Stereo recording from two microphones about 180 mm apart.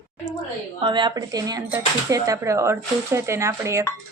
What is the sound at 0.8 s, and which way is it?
Speech, 25° right (ahead or behind).